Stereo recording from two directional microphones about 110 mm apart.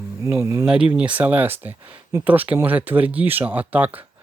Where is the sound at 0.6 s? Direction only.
10° right (ahead or behind).